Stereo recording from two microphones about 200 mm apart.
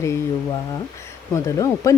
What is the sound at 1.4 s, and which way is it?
Speech, 15° left (ahead or behind).